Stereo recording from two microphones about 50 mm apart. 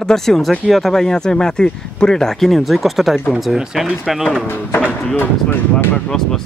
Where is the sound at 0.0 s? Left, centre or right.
Centre.